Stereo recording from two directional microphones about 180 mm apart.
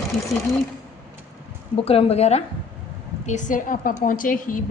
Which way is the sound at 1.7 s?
35° left (ahead or behind).